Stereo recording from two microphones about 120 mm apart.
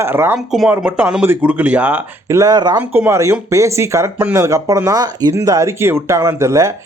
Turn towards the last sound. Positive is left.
turn(degrees=-25)  # may be behind; listen again after turning